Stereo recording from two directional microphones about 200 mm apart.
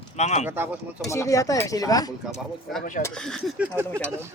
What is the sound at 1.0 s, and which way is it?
Speech, 15° left (ahead or behind).